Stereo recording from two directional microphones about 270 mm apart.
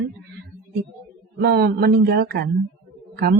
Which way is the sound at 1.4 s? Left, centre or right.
Right.